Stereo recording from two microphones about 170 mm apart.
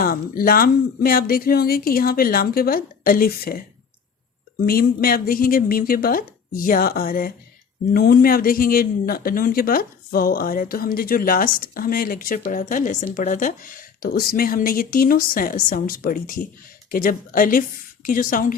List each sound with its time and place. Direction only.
0.0 s speech: 60° left (ahead or behind)
4.6 s speech: 60° left (ahead or behind)